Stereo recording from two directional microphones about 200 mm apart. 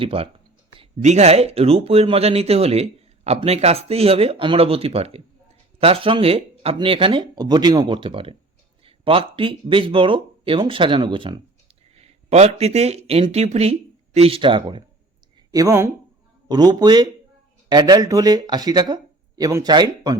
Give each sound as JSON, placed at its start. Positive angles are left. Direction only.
{"t": 0.0, "sound": "speech", "side_deg": -25}